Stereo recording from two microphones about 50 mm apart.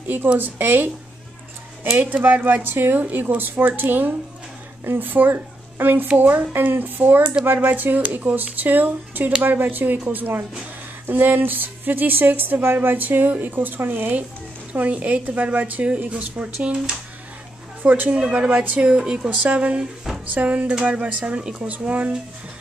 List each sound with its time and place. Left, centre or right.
0.4 s speech: right
2.0 s a woman's voice: right
14.7 s speech: right
17.8 s speech: right
18.1 s speech: right
18.8 s speech: centre
20.6 s speech: centre